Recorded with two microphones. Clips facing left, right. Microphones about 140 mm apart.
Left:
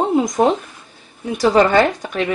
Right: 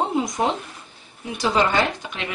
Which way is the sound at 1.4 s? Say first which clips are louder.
Left 7 dB; 50° left (ahead or behind).